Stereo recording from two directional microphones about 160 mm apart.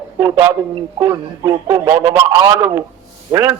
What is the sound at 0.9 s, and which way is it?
A man's voice, 25° right (ahead or behind).